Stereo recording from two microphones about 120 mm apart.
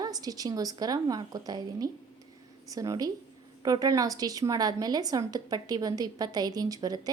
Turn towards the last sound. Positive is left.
turn(degrees=-30)  # may be behind; listen again after turning